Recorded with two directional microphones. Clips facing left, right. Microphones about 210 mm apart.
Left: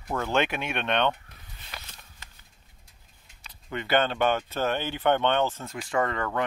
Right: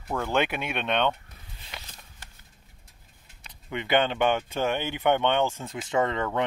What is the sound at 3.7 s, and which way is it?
Speech, 15° right (ahead or behind).